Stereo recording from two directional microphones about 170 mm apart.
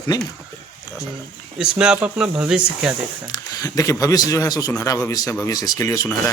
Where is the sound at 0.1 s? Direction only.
25° left (ahead or behind).